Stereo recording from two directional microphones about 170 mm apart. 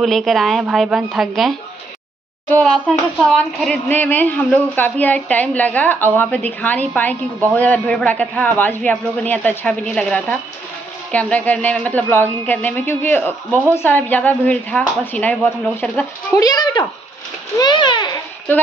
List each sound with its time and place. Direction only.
0.0 s a woman's voice: centre (ahead or behind)
16.3 s a child's voice: 25° left (ahead or behind)